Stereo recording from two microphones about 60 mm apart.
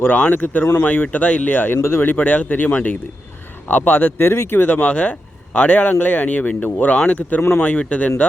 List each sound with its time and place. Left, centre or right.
0.3 s speech: left
4.7 s speech: left